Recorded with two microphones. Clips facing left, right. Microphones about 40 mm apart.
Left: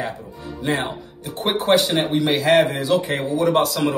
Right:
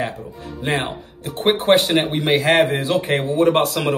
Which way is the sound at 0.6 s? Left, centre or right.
Right.